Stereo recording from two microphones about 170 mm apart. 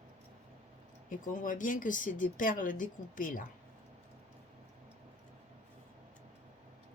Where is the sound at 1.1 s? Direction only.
50° left (ahead or behind).